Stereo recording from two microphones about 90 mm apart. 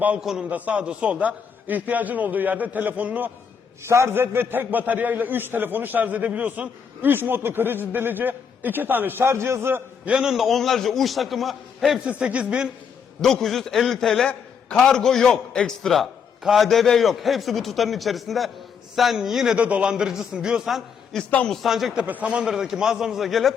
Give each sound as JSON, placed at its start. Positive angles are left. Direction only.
{"t": 0.2, "sound": "a man's voice", "side_deg": -5}
{"t": 3.8, "sound": "a man's voice", "side_deg": -30}
{"t": 10.1, "sound": "a man's voice", "side_deg": -5}
{"t": 12.0, "sound": "a man's voice", "side_deg": -15}
{"t": 13.2, "sound": "a man's voice", "side_deg": 5}
{"t": 19.5, "sound": "a man's voice", "side_deg": -15}
{"t": 21.2, "sound": "a man's voice", "side_deg": 15}
{"t": 21.5, "sound": "a man's voice", "side_deg": 0}
{"t": 22.0, "sound": "a man's voice", "side_deg": -15}